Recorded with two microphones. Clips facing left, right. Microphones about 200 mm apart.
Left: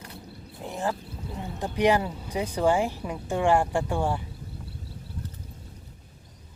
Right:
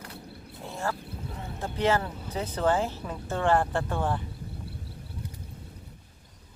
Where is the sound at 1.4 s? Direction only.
15° left (ahead or behind).